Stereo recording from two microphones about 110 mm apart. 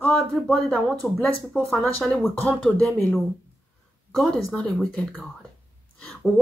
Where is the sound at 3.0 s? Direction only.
20° left (ahead or behind).